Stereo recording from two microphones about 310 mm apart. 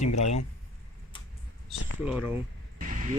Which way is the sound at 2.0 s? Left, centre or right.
Centre.